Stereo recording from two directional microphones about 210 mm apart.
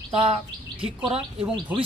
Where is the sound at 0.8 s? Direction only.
5° right (ahead or behind).